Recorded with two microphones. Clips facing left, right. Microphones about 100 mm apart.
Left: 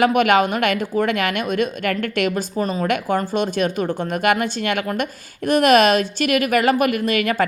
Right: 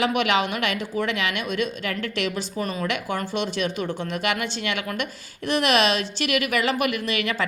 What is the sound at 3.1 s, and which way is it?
A woman's voice, 45° left (ahead or behind).